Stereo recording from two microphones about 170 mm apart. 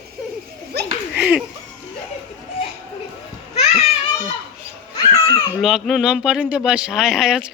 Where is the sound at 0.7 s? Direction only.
75° right (ahead or behind).